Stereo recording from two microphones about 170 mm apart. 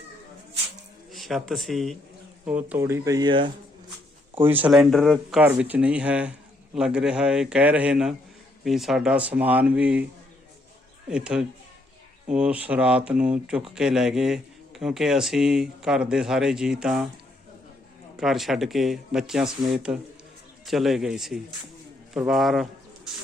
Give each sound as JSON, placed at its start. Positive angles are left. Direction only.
{"t": 1.1, "sound": "speech", "side_deg": 0}
{"t": 4.4, "sound": "speech", "side_deg": -10}
{"t": 5.4, "sound": "speech", "side_deg": -10}
{"t": 11.1, "sound": "speech", "side_deg": -5}
{"t": 18.2, "sound": "a man's voice", "side_deg": 0}